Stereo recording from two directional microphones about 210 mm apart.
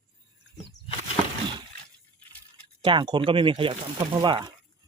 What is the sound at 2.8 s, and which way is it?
Speech, 20° right (ahead or behind).